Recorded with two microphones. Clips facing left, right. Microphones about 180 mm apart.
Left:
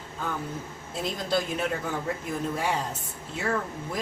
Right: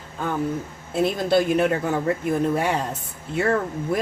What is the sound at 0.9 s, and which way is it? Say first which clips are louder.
Speech: right 9 dB; 65° right (ahead or behind).